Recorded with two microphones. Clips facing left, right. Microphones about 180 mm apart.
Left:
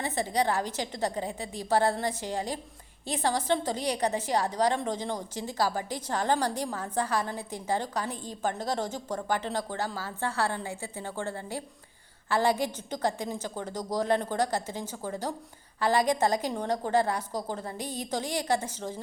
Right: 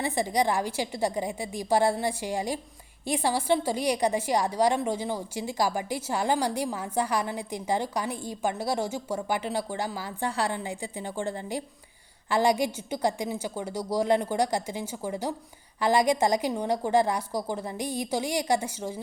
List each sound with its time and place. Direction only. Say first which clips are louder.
0.0 s a woman's voice: right 2 dB; 15° right (ahead or behind)